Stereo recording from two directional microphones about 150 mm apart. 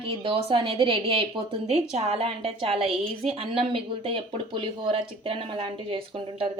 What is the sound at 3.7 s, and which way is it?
A woman's voice, 35° right (ahead or behind).